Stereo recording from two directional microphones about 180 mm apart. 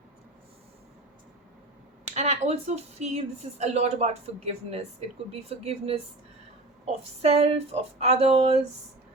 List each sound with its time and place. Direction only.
2.0 s speech: 40° right (ahead or behind)